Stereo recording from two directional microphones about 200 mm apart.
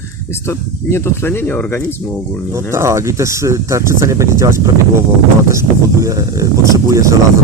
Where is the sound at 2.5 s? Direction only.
15° right (ahead or behind).